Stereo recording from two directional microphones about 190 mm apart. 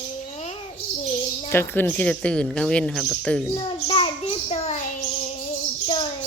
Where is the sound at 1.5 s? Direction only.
10° left (ahead or behind).